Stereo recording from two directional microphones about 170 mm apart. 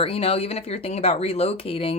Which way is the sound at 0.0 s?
35° left (ahead or behind).